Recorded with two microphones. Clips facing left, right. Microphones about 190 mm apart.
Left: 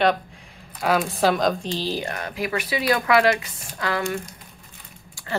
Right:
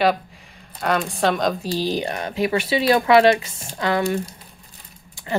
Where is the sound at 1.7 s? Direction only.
15° right (ahead or behind).